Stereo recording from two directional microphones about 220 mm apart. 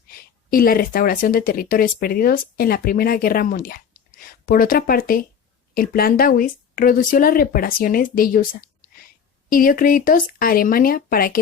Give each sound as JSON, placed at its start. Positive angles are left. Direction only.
{"t": 0.1, "sound": "a woman's voice", "side_deg": 40}
{"t": 9.5, "sound": "a woman's voice", "side_deg": 40}